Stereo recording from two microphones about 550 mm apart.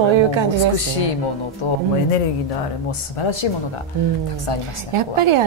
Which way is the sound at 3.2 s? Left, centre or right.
Left.